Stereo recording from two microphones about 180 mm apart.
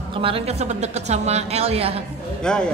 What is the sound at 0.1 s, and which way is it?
A woman's voice, 30° right (ahead or behind).